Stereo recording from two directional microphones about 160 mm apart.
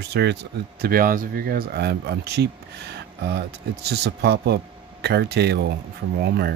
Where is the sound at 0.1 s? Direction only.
90° right.